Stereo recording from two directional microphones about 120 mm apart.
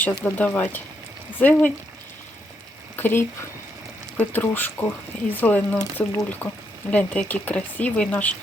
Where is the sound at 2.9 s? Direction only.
15° left (ahead or behind).